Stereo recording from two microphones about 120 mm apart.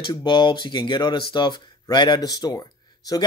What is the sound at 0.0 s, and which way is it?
Speech, 40° left (ahead or behind).